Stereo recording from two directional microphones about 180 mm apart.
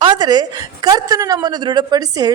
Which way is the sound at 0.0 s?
25° right (ahead or behind).